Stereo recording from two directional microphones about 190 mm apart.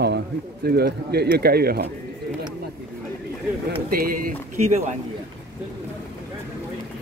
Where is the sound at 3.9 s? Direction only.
50° right (ahead or behind).